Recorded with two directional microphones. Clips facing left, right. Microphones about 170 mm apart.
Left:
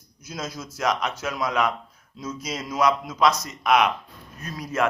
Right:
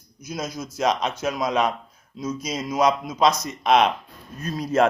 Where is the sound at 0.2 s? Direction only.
15° right (ahead or behind).